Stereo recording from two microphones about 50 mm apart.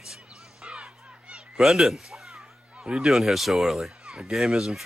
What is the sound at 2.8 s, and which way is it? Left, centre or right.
Speech, centre.